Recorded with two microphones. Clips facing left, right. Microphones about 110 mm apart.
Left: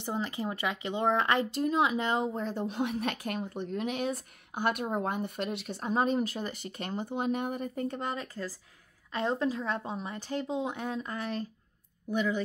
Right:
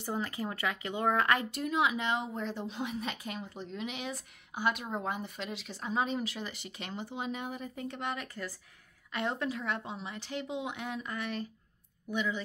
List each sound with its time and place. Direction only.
0.0 s speech: 25° left (ahead or behind); by 12.4 s 40° left (ahead or behind)